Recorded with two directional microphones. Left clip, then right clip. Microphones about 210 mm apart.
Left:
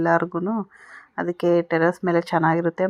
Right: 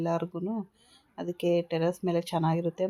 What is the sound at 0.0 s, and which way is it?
Speech, 20° left (ahead or behind).